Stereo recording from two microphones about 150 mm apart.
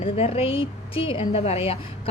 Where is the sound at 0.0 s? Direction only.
40° left (ahead or behind).